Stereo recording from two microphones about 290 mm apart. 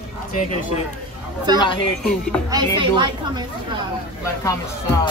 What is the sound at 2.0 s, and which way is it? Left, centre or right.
Speech, centre.